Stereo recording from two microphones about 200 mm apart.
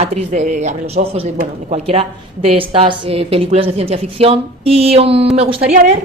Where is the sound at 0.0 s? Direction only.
35° right (ahead or behind).